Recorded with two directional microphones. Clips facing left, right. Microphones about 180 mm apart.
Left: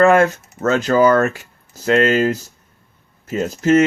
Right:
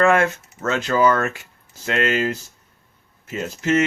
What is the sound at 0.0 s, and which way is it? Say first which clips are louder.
Speech: left 5 dB; 40° left (ahead or behind).